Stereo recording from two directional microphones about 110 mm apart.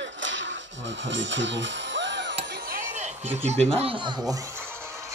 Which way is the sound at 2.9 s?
90° right.